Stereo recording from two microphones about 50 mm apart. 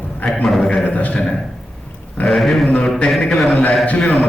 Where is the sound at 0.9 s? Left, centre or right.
Left.